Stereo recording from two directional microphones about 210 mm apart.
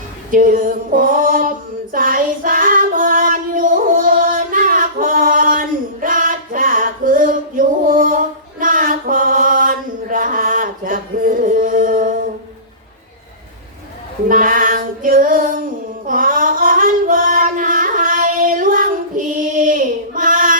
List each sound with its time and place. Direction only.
0.3 s female singing: 40° right (ahead or behind)
14.3 s child singing: 40° right (ahead or behind)
16.0 s a sound: 40° right (ahead or behind)